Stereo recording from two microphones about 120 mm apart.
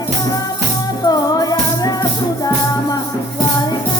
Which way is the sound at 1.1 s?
30° left (ahead or behind).